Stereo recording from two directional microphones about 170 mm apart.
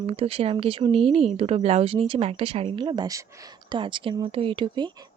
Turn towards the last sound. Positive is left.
turn(degrees=-25)  # may be behind; listen again after turning